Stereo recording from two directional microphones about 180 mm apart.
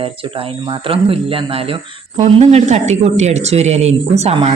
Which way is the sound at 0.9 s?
30° right (ahead or behind).